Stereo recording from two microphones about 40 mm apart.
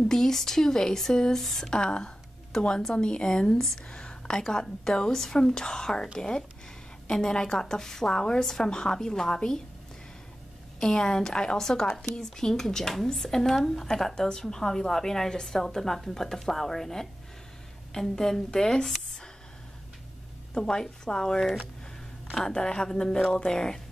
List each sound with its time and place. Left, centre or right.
0.1 s a woman's voice: centre
3.5 s speech: centre
3.9 s a woman's voice: left
10.8 s a woman's voice: centre
20.6 s a woman's voice: centre
22.5 s a woman's voice: centre